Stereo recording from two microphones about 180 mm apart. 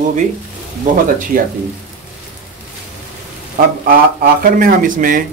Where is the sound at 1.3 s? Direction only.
50° right (ahead or behind).